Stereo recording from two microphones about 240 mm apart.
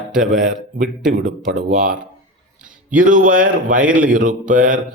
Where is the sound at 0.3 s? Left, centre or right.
Right.